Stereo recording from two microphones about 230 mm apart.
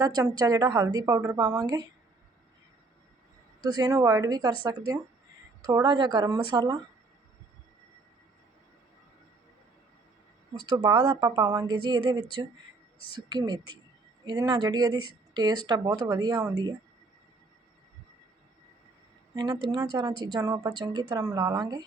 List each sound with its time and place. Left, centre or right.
0.0 s a woman's voice: centre
3.6 s a woman's voice: centre
5.6 s speech: centre
10.8 s a woman's voice: centre
19.6 s a woman's voice: centre